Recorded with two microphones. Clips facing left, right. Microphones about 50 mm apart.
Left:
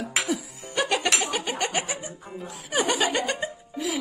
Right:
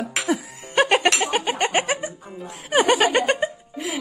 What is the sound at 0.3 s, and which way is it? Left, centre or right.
Music, right.